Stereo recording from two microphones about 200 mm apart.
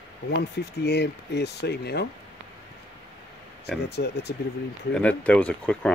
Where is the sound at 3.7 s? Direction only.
55° left (ahead or behind).